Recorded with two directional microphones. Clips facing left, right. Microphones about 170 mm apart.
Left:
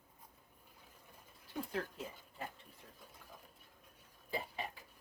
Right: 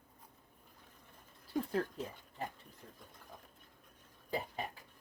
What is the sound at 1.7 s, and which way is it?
Dog, 40° right (ahead or behind).